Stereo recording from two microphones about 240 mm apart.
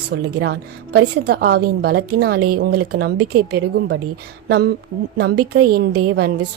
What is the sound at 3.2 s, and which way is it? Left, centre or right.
Speech, right.